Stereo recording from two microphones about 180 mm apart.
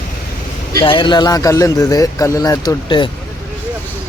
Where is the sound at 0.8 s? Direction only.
25° left (ahead or behind).